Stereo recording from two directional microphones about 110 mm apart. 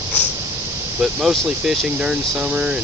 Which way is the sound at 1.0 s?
5° right (ahead or behind).